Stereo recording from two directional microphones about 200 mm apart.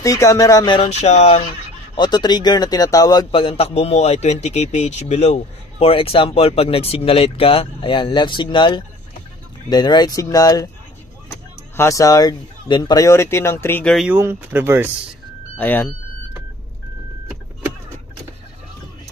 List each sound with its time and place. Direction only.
0.0 s speech: 15° left (ahead or behind)
11.7 s speech: 15° left (ahead or behind)
13.9 s speech: 10° right (ahead or behind)
15.5 s speech: 10° left (ahead or behind)